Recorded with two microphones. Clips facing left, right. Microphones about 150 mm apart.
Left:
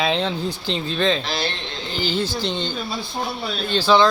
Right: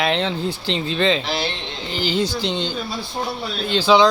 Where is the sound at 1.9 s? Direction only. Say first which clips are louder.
Right 2 dB; 90° right.